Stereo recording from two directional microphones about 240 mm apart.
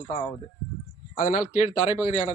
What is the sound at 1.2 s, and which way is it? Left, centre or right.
Speech, left.